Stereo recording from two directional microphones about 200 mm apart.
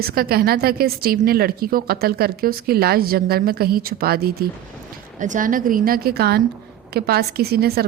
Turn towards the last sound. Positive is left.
turn(degrees=-50)  # may be behind; listen again after turning